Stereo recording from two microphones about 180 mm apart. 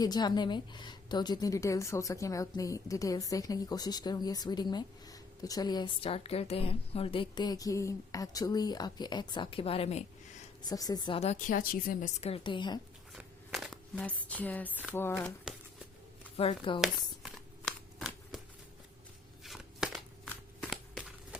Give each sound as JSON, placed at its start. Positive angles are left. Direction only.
{"t": 0.0, "sound": "a woman's voice", "side_deg": 25}
{"t": 10.7, "sound": "a woman's voice", "side_deg": 20}
{"t": 13.1, "sound": "a sound", "side_deg": 0}
{"t": 14.9, "sound": "speech", "side_deg": 10}
{"t": 16.4, "sound": "a woman's voice", "side_deg": 30}
{"t": 16.8, "sound": "a sound", "side_deg": 0}
{"t": 19.4, "sound": "shuffling cards", "side_deg": 0}